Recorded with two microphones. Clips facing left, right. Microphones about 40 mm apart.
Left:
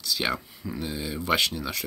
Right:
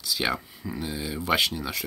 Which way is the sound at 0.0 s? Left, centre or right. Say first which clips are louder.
Even; centre.